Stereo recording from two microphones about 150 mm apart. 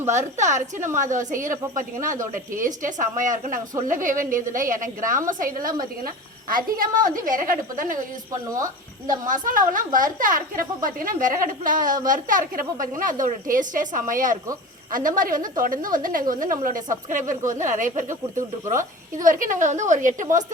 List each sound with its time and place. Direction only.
0.1 s a woman's voice: 55° right (ahead or behind)
8.4 s speech: 25° right (ahead or behind)
9.2 s a woman's voice: 60° right (ahead or behind)